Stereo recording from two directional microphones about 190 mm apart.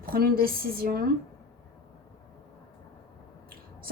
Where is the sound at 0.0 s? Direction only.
50° right (ahead or behind).